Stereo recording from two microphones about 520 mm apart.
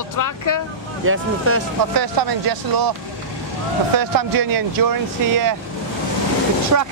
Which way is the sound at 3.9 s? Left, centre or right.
Right.